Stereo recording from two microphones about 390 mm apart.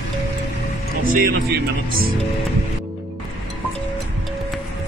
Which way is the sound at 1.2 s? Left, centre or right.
Right.